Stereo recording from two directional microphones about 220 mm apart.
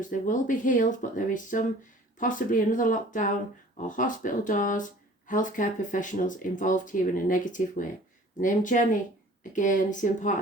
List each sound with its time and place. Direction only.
0.0 s speech: 35° left (ahead or behind)